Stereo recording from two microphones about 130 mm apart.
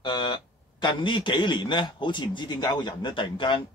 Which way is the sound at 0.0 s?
35° left (ahead or behind).